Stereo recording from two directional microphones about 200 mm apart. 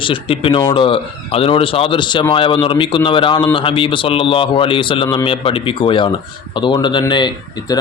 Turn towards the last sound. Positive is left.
turn(degrees=20)  # may be behind; listen again after turning